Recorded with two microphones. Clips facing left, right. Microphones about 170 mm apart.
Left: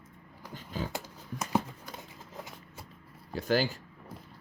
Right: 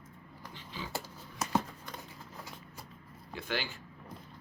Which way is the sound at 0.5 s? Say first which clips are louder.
Left 8 dB; 45° left (ahead or behind).